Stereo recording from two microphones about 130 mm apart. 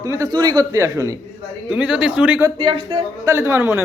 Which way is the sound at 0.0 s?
25° right (ahead or behind).